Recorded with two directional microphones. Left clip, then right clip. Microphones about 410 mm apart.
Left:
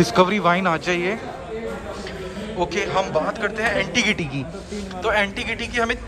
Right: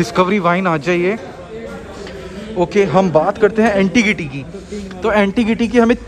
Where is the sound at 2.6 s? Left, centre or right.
Centre.